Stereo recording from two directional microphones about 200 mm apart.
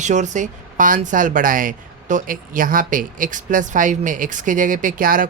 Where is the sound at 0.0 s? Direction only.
35° right (ahead or behind).